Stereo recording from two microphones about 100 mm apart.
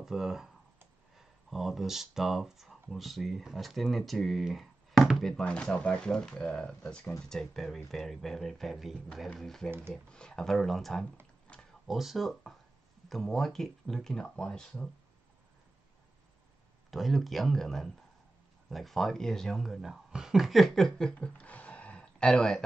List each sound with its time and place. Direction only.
0.0 s speech: 5° right (ahead or behind)
5.3 s speech: 10° left (ahead or behind)
9.7 s speech: 25° right (ahead or behind)
10.0 s speech: 10° left (ahead or behind)
11.5 s a sound: 10° left (ahead or behind)
11.9 s speech: centre (ahead or behind)
16.9 s speech: centre (ahead or behind)